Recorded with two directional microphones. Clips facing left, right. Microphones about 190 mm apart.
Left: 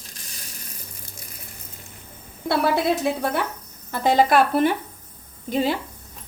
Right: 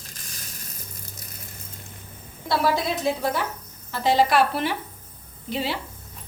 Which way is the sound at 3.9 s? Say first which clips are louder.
Left 2 dB; 50° left (ahead or behind).